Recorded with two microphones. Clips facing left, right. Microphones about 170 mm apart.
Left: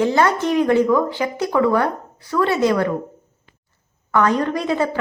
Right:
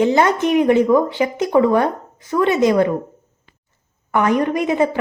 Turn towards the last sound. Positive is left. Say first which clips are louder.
# right 3 dB
turn(degrees=-20)  # may be behind; listen again after turning